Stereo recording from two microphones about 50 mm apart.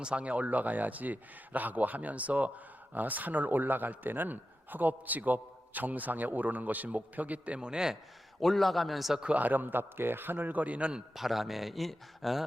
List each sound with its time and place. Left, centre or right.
0.0 s a man's voice: right
8.4 s speech: centre
9.2 s a man's voice: right
11.1 s speech: centre